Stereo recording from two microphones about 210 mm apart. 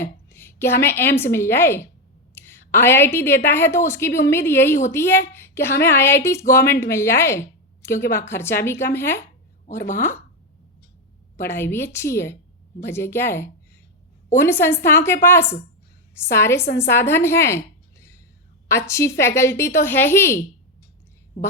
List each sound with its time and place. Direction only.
0.0 s a woman's voice: 10° left (ahead or behind)
11.3 s a woman's voice: 10° left (ahead or behind)
18.7 s a woman's voice: 15° left (ahead or behind)